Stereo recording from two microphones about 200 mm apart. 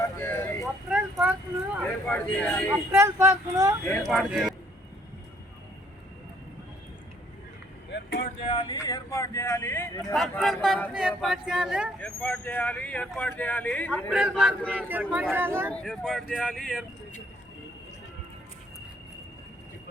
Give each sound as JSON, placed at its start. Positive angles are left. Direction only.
{"t": 0.0, "sound": "vehicle", "side_deg": 10}
{"t": 0.6, "sound": "a sound", "side_deg": 0}
{"t": 1.8, "sound": "speech", "side_deg": 5}
{"t": 2.9, "sound": "speech", "side_deg": -15}
{"t": 4.0, "sound": "speech", "side_deg": 0}
{"t": 7.9, "sound": "vehicle", "side_deg": 60}
{"t": 8.4, "sound": "speech", "side_deg": 20}
{"t": 10.2, "sound": "speech", "side_deg": 0}
{"t": 14.1, "sound": "speech", "side_deg": -5}
{"t": 15.7, "sound": "speech", "side_deg": 0}